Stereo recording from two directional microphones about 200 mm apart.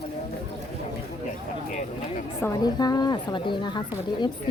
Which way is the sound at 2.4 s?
20° left (ahead or behind).